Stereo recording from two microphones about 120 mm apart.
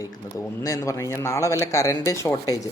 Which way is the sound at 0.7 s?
25° left (ahead or behind).